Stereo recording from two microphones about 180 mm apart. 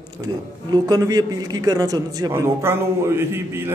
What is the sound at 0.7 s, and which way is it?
A man's voice, 20° right (ahead or behind).